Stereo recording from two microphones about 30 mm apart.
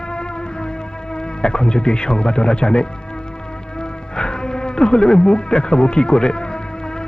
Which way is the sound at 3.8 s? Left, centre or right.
Left.